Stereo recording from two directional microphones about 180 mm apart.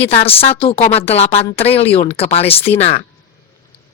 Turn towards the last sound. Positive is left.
turn(degrees=35)  # may be behind; listen again after turning